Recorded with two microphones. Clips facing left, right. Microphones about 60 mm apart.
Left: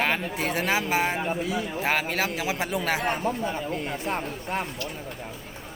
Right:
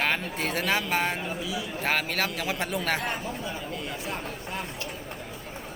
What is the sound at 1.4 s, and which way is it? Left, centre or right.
Speech, left.